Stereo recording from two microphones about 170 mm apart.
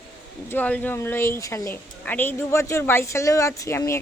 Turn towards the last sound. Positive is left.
turn(degrees=15)  # may be behind; listen again after turning